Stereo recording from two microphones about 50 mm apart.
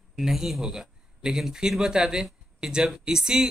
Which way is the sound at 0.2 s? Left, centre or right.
Centre.